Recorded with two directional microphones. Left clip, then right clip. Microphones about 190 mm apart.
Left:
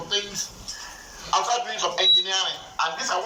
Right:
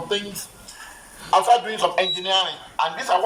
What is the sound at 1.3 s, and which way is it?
A man's voice, 45° right (ahead or behind).